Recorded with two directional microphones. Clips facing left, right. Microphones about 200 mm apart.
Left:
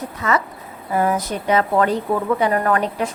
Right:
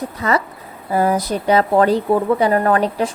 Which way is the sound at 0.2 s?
35° right (ahead or behind).